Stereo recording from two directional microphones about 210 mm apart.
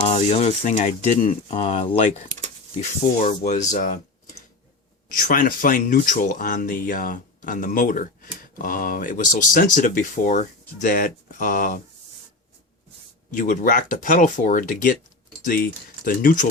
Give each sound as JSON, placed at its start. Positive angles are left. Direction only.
{"t": 0.1, "sound": "speech", "side_deg": 30}
{"t": 13.3, "sound": "speech", "side_deg": 40}